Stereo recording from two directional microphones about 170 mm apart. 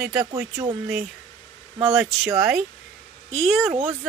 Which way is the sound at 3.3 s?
5° left (ahead or behind).